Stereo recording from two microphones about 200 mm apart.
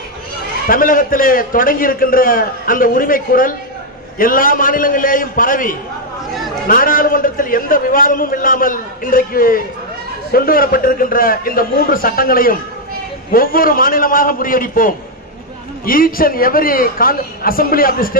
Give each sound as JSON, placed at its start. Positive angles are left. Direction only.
{"t": 0.7, "sound": "a man's voice", "side_deg": 45}